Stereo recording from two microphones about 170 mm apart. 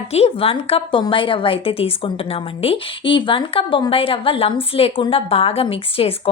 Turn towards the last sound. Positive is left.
turn(degrees=35)  # may be behind; listen again after turning